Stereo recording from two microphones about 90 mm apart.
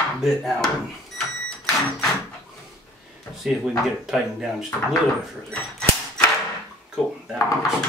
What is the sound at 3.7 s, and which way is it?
Speech, 5° right (ahead or behind).